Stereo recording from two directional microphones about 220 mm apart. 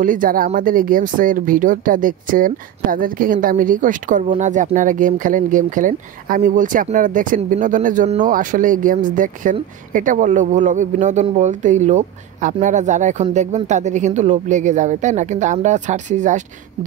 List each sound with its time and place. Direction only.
0.0 s speech: 40° right (ahead or behind)